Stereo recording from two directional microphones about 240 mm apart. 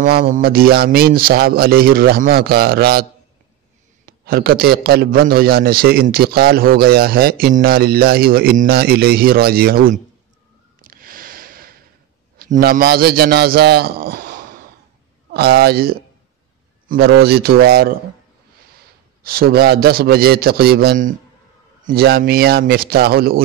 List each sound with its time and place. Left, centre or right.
0.0 s a man's voice: right
10.8 s sniff: right
12.4 s a man's voice: right
15.3 s a man's voice: right
19.2 s a man's voice: right